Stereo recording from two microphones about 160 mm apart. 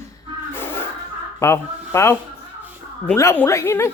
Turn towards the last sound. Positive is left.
turn(degrees=15)  # may be behind; listen again after turning